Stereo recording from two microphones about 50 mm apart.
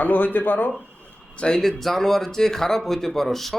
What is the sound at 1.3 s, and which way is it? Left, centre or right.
Speech, left.